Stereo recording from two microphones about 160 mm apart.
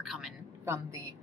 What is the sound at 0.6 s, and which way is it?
Speech, 15° right (ahead or behind).